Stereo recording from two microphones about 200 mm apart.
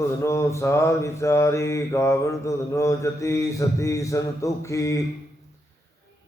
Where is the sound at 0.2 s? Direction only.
15° left (ahead or behind).